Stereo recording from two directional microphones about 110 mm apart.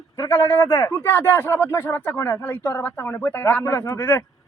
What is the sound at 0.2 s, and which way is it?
A man's voice, 25° left (ahead or behind).